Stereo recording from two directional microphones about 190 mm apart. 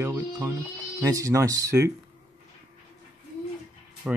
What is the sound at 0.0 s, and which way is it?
Music, 20° right (ahead or behind).